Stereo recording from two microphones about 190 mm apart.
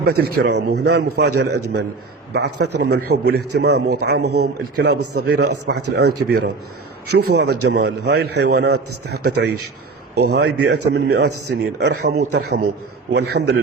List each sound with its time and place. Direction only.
0.0 s a man's voice: 55° right (ahead or behind)